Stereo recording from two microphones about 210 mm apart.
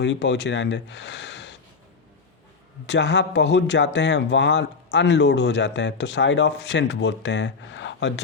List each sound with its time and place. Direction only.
0.0 s speech: 55° left (ahead or behind)
2.8 s a man's voice: 55° left (ahead or behind)